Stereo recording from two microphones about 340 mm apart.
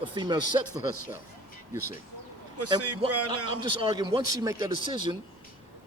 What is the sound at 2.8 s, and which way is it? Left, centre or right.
Speech, right.